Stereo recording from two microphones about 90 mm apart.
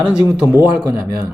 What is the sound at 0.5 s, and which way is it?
Speech, 25° right (ahead or behind).